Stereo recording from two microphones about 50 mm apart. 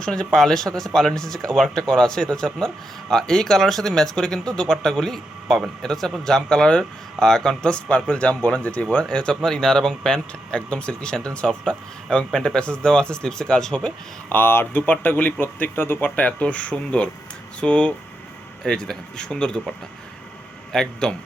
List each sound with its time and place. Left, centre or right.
0.0 s speech: centre; by 9.0 s left
9.0 s speech: centre
14.3 s speech: left
16.0 s speech: left
20.7 s speech: centre